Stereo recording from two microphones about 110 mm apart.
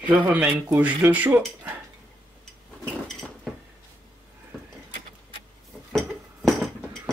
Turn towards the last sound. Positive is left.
turn(degrees=0)  # may be behind; listen again after turning